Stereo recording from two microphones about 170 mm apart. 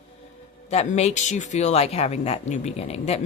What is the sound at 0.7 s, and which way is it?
Speech, 40° left (ahead or behind).